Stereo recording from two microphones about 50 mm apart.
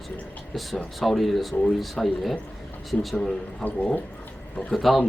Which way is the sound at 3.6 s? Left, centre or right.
Left.